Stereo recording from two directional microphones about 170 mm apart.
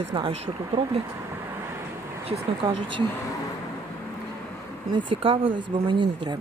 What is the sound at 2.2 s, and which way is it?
Speech, 35° right (ahead or behind).